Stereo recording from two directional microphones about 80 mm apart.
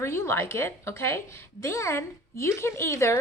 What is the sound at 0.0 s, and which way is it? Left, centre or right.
A woman's voice, left.